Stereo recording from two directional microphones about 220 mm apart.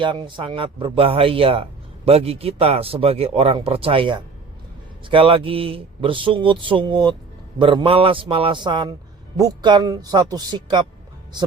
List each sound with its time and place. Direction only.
0.0 s a man's voice: 20° right (ahead or behind)